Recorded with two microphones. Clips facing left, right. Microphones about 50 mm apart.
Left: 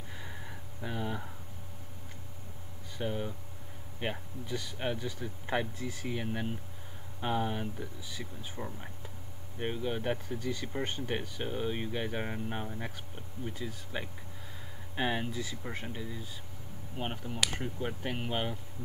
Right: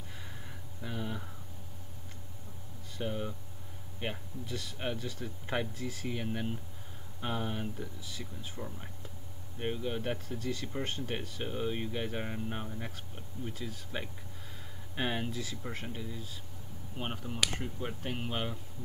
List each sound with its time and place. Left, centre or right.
0.1 s a sound: centre
3.0 s speech: centre
15.0 s speech: centre
17.8 s speech: centre